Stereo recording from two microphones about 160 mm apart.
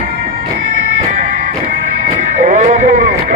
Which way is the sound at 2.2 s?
50° right (ahead or behind).